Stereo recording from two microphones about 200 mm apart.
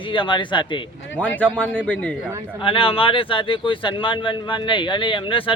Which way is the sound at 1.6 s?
5° left (ahead or behind).